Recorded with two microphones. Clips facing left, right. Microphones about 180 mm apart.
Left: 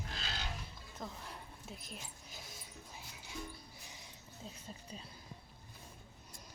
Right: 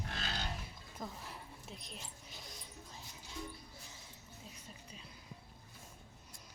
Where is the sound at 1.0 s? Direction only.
Centre (ahead or behind).